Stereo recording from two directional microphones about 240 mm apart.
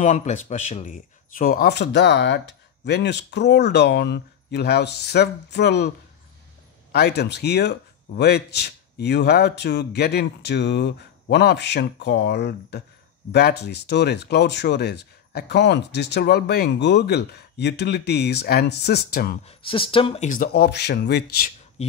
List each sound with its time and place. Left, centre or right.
0.0 s speech: left
6.9 s speech: left
19.4 s speech: left